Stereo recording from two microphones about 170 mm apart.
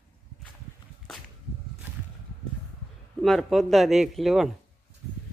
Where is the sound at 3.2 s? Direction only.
Centre (ahead or behind).